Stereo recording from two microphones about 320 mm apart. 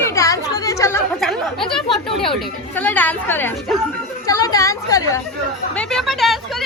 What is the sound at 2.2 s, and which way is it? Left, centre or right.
A woman's voice, centre.